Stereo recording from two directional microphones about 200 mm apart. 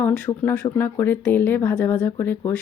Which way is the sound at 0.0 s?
5° left (ahead or behind).